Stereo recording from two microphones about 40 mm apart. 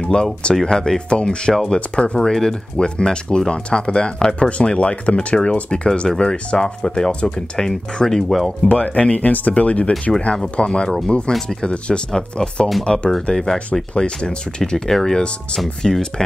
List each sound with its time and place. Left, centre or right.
0.0 s speech: centre
2.1 s speech: centre
8.6 s speech: left
14.9 s speech: centre